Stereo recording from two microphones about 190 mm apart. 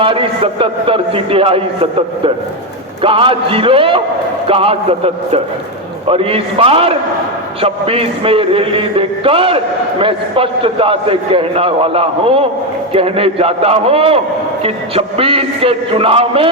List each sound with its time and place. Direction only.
0.0 s a man's voice: 25° right (ahead or behind)